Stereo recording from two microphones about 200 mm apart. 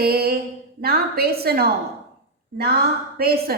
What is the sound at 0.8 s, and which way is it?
A woman's voice, 50° right (ahead or behind).